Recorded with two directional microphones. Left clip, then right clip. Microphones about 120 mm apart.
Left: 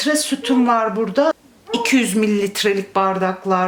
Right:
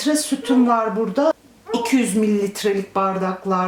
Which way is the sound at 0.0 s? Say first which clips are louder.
Left 2 dB; 15° left (ahead or behind).